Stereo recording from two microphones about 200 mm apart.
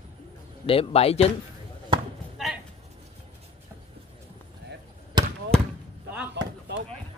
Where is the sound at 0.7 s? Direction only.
30° left (ahead or behind).